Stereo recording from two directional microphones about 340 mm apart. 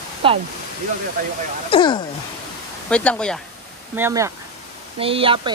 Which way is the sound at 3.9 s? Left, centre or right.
Centre.